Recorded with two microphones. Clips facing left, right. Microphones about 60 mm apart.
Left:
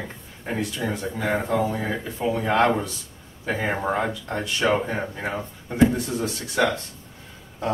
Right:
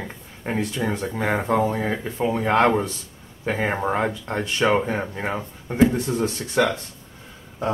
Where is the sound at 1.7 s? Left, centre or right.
Right.